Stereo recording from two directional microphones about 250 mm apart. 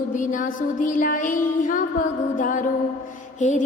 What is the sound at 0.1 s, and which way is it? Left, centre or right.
Music, left.